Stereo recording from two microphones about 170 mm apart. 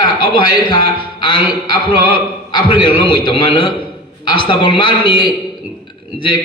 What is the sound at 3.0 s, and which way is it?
A man's voice, 30° left (ahead or behind).